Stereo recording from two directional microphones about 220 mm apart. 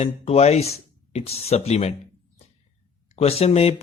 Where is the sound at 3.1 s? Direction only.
30° left (ahead or behind).